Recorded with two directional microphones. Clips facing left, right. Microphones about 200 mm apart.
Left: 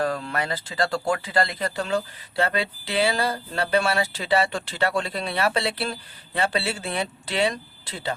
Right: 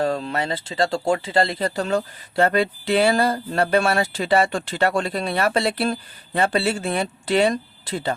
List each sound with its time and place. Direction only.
0.0 s speech: 25° right (ahead or behind); by 7.5 s 45° right (ahead or behind)